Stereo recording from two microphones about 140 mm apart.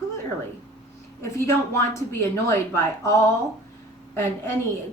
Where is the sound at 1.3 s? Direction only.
20° left (ahead or behind).